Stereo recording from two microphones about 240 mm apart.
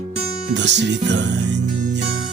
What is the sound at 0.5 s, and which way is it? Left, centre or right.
Music, right.